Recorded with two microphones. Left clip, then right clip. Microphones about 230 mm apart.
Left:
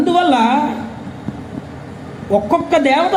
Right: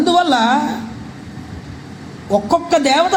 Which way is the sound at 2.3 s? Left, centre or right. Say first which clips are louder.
Even; right.